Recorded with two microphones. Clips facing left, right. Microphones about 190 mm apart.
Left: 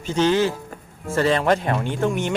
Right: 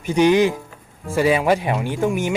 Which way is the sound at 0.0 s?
15° right (ahead or behind).